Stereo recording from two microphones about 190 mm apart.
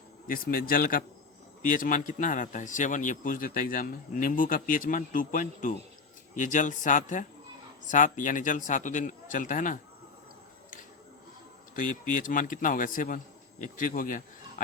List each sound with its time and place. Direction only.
0.3 s a man's voice: 50° left (ahead or behind)
11.7 s a man's voice: 45° left (ahead or behind)